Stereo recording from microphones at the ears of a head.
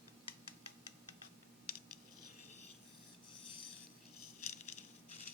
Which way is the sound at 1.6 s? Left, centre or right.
Left.